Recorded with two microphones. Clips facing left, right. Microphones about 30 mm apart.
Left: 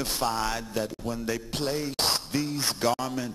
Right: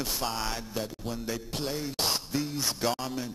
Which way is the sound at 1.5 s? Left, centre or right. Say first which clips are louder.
Left 3 dB; left.